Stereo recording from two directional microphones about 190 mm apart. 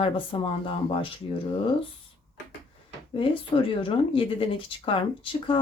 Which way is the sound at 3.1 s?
25° left (ahead or behind).